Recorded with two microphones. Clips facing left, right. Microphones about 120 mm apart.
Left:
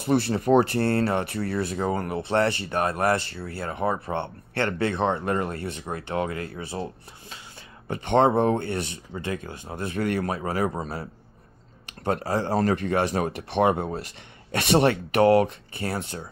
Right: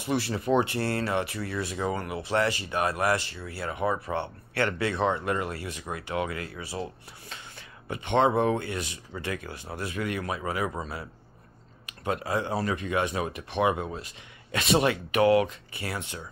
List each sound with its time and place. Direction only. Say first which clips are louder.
0.3 s speech: left 4 dB; 40° left (ahead or behind)
0.9 s speech: left 3 dB; 30° left (ahead or behind)
1.2 s speech: left 5 dB; 55° left (ahead or behind)
1.7 s speech: left 4 dB; 35° left (ahead or behind)
3.1 s speech: left 3 dB; 30° left (ahead or behind)
5.7 s speech: left 3 dB; 30° left (ahead or behind)
7.9 s speech: left 3 dB; 40° left (ahead or behind)
9.8 s speech: left 5 dB; 40° left (ahead or behind)
12.0 s speech: left 3 dB; 35° left (ahead or behind)
14.5 s speech: left 3 dB; 60° left (ahead or behind)
14.8 s speech: left 4 dB; 35° left (ahead or behind)